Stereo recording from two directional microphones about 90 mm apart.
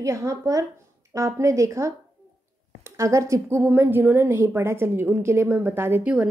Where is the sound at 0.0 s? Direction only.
35° right (ahead or behind).